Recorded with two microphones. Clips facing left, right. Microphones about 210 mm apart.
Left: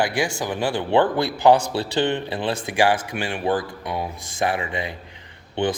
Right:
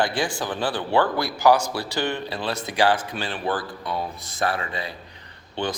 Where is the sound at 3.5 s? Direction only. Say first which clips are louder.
Left 4 dB; 25° left (ahead or behind).